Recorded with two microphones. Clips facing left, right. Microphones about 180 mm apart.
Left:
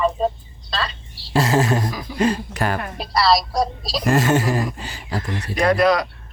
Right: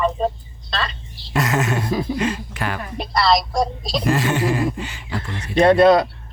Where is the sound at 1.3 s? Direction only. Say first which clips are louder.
Left 3 dB; 30° left (ahead or behind).